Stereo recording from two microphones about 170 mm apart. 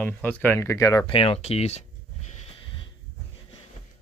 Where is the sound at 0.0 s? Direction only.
10° left (ahead or behind).